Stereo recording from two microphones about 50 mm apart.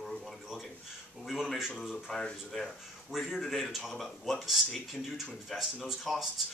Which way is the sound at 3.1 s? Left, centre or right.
Centre.